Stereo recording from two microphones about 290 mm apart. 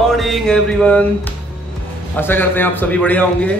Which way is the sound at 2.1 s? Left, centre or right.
Centre.